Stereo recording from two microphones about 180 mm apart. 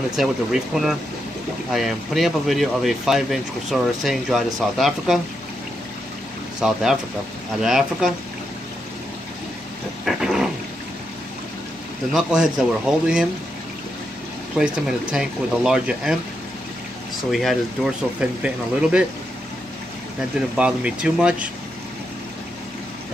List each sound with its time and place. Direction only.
0.1 s speech: centre (ahead or behind)
6.6 s speech: centre (ahead or behind)
10.0 s a sound: centre (ahead or behind)
12.1 s speech: 5° right (ahead or behind)
14.6 s speech: 5° right (ahead or behind)
17.3 s speech: centre (ahead or behind)
20.3 s speech: 5° right (ahead or behind)